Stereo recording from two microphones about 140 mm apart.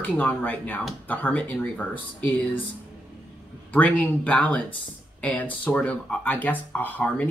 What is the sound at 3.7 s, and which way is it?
Speech, 10° left (ahead or behind).